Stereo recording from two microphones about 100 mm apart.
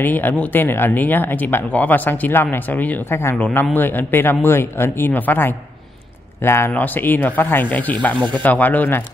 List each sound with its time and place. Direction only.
0.0 s speech: 20° left (ahead or behind)